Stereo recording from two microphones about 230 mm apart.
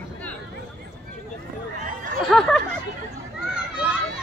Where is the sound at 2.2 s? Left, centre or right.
Centre.